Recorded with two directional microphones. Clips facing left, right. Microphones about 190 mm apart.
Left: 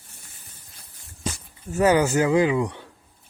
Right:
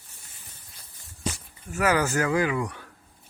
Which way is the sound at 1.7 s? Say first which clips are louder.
Left 5 dB; 25° left (ahead or behind).